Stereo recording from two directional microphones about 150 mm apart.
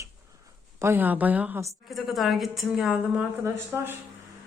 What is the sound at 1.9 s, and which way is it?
A woman's voice, centre (ahead or behind).